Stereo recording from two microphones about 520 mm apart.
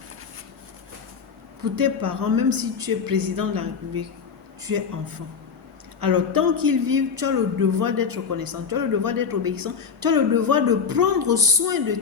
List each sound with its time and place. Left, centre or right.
1.7 s a man's voice: right